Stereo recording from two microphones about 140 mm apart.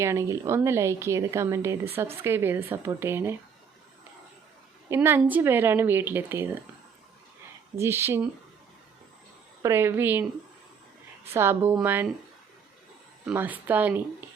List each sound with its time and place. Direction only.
0.0 s a woman's voice: 20° right (ahead or behind)
4.9 s speech: 15° right (ahead or behind)
7.8 s speech: 20° right (ahead or behind)
9.6 s speech: 15° right (ahead or behind)
11.3 s speech: 15° right (ahead or behind)
13.3 s speech: 15° right (ahead or behind)